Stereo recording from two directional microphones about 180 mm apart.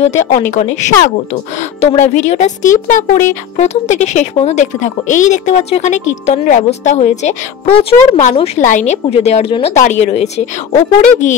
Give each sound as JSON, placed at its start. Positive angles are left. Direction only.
{"t": 0.0, "sound": "speech", "side_deg": 40}